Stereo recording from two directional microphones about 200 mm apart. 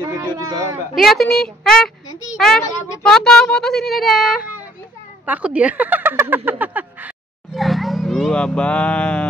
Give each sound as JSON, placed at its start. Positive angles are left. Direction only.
{"t": 0.1, "sound": "speech", "side_deg": -20}
{"t": 0.9, "sound": "speech", "side_deg": 0}